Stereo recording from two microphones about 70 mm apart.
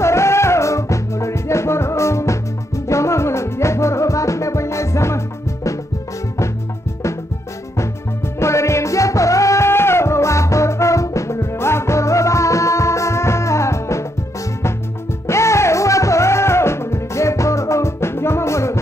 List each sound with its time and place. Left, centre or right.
0.0 s music: left
8.4 s music: left
15.2 s music: left